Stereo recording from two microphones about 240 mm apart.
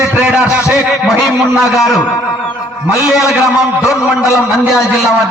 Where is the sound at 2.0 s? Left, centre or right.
Centre.